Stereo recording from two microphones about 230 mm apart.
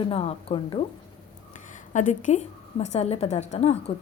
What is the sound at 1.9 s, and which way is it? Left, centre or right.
A woman's voice, left.